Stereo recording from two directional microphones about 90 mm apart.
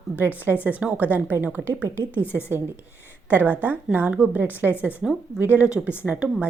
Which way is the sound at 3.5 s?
20° right (ahead or behind).